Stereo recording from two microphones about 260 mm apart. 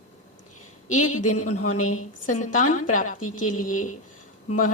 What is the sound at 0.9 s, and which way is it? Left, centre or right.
A woman's voice, left.